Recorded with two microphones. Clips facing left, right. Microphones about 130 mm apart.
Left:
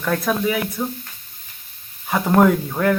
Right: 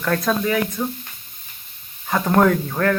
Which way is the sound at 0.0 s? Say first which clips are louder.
Even; 10° left (ahead or behind).